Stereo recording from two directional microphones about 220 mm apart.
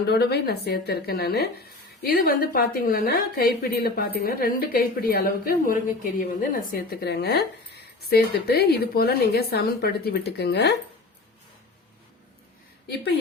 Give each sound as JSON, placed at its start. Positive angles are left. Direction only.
{"t": 0.0, "sound": "speech", "side_deg": 45}